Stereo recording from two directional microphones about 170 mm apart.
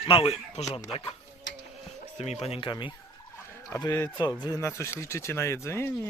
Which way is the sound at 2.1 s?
40° left (ahead or behind).